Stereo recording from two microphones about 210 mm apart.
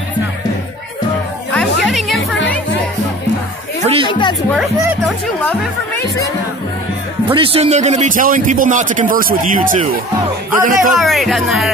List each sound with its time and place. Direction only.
1.5 s music: centre (ahead or behind)
3.8 s music: 25° right (ahead or behind)
4.1 s speech: 20° left (ahead or behind)
4.5 s speech: centre (ahead or behind)
7.3 s a man's voice: 25° right (ahead or behind)
10.9 s speech: centre (ahead or behind)